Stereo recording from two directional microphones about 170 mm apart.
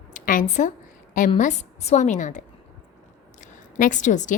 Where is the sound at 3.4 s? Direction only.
45° left (ahead or behind).